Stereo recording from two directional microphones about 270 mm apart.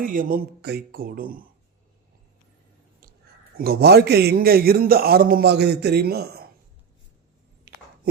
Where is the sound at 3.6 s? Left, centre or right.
Right.